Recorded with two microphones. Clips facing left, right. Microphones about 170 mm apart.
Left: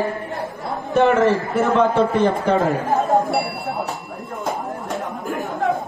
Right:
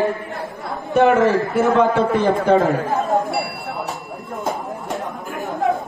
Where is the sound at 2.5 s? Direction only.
Centre (ahead or behind).